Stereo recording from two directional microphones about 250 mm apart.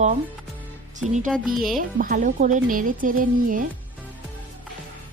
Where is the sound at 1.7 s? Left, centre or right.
Right.